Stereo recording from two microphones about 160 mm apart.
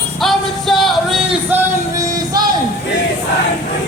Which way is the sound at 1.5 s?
20° right (ahead or behind).